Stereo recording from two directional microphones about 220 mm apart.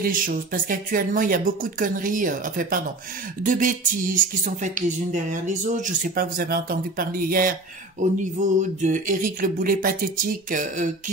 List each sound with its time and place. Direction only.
0.0 s speech: 40° right (ahead or behind)